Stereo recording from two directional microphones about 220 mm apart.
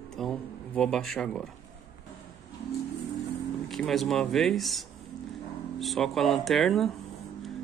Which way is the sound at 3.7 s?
Centre (ahead or behind).